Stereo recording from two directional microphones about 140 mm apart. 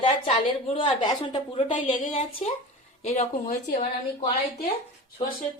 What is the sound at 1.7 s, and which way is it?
Speech, 65° left (ahead or behind).